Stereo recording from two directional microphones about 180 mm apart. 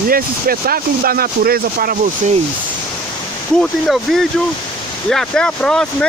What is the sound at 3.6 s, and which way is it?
Speech, centre (ahead or behind).